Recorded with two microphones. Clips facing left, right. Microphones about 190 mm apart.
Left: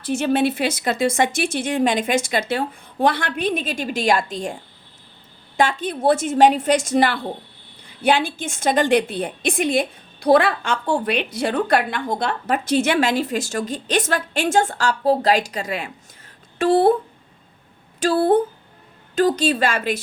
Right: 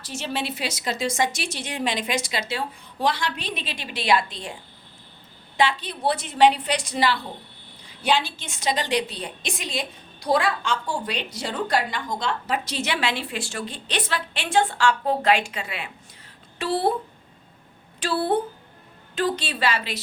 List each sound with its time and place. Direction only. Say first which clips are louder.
0.0 s a woman's voice: left 11 dB; 55° left (ahead or behind)
5.5 s a woman's voice: left 3 dB; 50° left (ahead or behind)
18.0 s a woman's voice: left 7 dB; 45° left (ahead or behind)